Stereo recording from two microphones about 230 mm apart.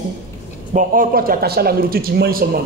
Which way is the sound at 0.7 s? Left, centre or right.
Right.